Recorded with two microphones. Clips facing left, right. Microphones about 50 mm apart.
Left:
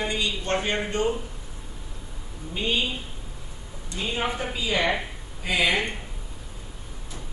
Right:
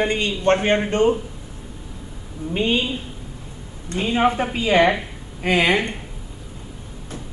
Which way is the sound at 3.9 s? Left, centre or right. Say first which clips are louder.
Right 9 dB; right.